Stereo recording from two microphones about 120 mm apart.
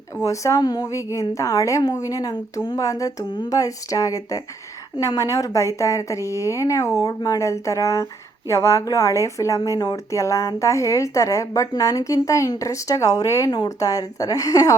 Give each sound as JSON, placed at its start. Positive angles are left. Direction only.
{"t": 0.2, "sound": "speech", "side_deg": 25}